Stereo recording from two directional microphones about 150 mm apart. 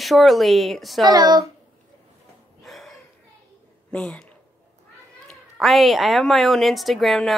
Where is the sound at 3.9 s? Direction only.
10° left (ahead or behind).